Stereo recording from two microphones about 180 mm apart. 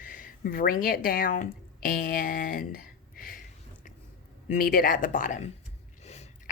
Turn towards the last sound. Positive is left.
turn(degrees=35)  # may be behind; listen again after turning